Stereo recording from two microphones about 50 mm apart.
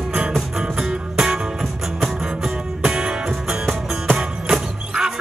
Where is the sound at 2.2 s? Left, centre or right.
Centre.